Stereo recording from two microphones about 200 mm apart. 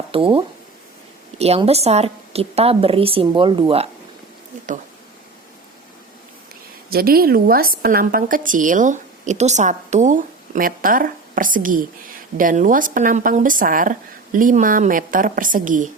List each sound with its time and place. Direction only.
0.1 s a woman's voice: 25° right (ahead or behind)
6.9 s a woman's voice: 50° right (ahead or behind)